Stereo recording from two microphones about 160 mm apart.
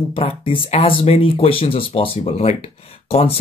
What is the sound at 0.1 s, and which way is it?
Speech, 35° left (ahead or behind).